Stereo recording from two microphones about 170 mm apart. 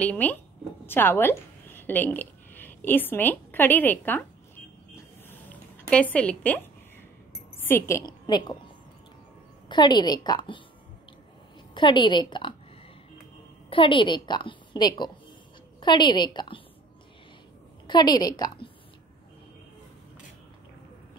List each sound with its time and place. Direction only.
0.0 s a woman's voice: 10° left (ahead or behind)
4.9 s a sound: 15° left (ahead or behind)
7.5 s a woman's voice: 15° left (ahead or behind)
9.7 s a woman's voice: 25° left (ahead or behind)
11.7 s a woman's voice: 25° left (ahead or behind)
13.7 s a woman's voice: 30° left (ahead or behind)
17.8 s a woman's voice: 25° left (ahead or behind)